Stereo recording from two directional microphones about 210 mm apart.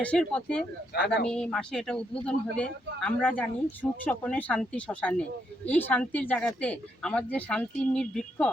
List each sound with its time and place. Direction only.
0.0 s speech: 5° left (ahead or behind)
0.9 s speech: 55° left (ahead or behind)
1.3 s speech: 5° left (ahead or behind)